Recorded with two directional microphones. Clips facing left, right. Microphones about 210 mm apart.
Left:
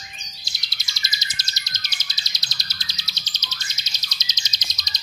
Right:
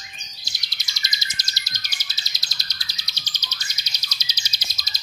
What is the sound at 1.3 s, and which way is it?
Bird, 25° left (ahead or behind).